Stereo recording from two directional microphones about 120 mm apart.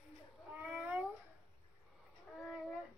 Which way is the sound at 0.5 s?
10° right (ahead or behind).